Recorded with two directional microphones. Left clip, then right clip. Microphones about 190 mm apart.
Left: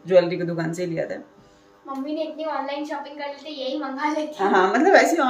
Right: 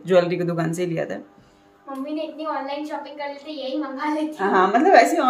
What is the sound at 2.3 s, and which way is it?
Speech, 10° left (ahead or behind).